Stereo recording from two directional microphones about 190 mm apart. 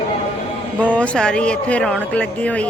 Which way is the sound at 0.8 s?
5° left (ahead or behind).